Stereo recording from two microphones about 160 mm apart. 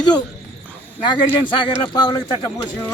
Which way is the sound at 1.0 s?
30° left (ahead or behind).